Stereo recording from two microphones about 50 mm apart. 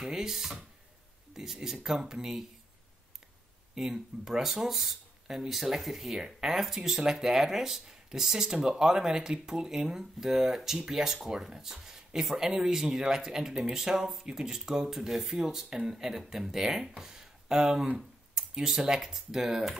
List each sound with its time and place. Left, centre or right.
0.0 s speech: centre
3.7 s speech: centre